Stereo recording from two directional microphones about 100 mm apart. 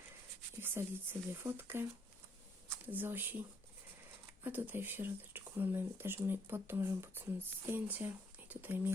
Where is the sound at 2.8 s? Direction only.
20° right (ahead or behind).